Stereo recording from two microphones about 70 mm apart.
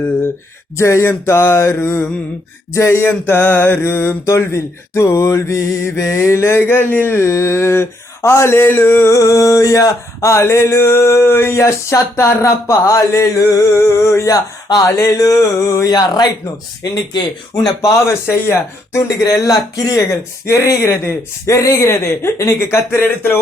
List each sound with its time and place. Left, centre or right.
0.8 s mantra: left
3.0 s mantra: left
9.1 s speech: left
10.3 s mantra: left
14.3 s speech: left
14.8 s speech: left
17.1 s speech: left
18.3 s mantra: left
18.9 s speech: left
22.7 s mantra: left